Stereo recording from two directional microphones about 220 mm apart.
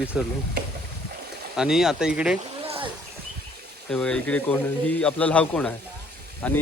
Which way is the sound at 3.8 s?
5° left (ahead or behind).